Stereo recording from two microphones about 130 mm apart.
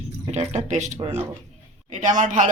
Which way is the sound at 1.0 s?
50° right (ahead or behind).